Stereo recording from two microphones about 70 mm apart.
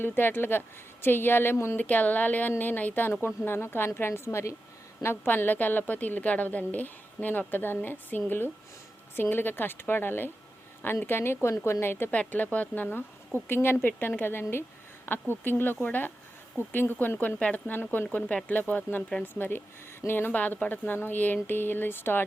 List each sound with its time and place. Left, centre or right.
0.0 s a woman's voice: left
3.1 s a woman's voice: left
12.1 s a woman's voice: left
18.2 s speech: centre
18.4 s a woman's voice: left